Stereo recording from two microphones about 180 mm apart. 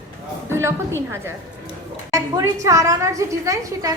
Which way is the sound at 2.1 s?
20° right (ahead or behind).